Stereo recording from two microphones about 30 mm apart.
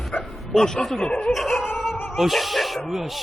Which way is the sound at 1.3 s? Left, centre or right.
Centre.